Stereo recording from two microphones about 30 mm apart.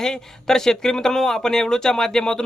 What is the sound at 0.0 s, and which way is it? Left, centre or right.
Speech, centre.